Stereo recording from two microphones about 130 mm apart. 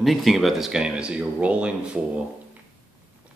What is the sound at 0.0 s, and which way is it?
Speech, centre (ahead or behind).